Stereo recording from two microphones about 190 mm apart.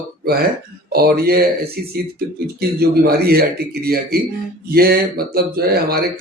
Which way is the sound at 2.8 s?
55° right (ahead or behind).